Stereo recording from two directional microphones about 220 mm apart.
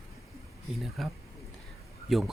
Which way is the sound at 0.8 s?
Centre (ahead or behind).